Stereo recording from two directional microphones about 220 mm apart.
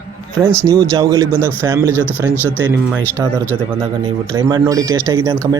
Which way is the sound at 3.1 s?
15° right (ahead or behind).